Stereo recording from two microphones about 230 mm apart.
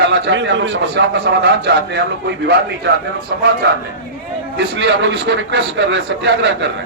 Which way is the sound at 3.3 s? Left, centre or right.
Right.